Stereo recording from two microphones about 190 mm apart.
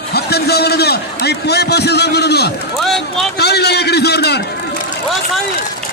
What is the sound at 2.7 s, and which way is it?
Speech, centre (ahead or behind).